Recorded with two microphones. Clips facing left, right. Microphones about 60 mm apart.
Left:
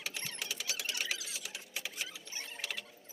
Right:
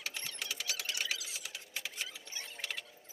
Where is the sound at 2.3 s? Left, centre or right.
Left.